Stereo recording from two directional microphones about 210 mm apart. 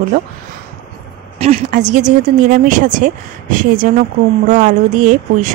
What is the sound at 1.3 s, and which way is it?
A woman's voice, 30° right (ahead or behind).